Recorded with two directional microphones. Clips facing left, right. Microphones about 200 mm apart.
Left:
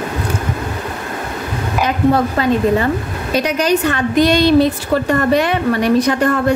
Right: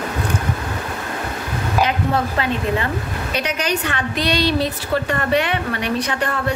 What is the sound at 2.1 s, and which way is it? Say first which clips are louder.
A woman's voice: left 6 dB; 40° left (ahead or behind).